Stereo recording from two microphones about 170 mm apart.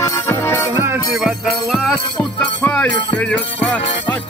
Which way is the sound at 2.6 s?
10° left (ahead or behind).